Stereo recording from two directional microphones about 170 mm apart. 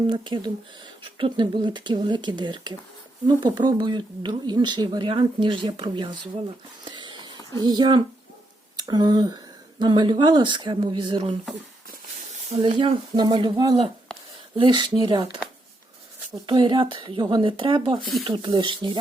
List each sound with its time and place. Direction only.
0.1 s speech: 25° right (ahead or behind)
6.8 s a sound: 25° right (ahead or behind)
7.6 s speech: 25° right (ahead or behind)
12.5 s speech: 35° right (ahead or behind)
16.5 s speech: 25° right (ahead or behind)
18.0 s speech: centre (ahead or behind)
18.3 s speech: 30° right (ahead or behind)